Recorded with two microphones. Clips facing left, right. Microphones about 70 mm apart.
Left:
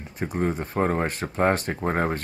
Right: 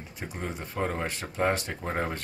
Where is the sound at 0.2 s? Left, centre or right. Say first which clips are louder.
Left 10 dB; left.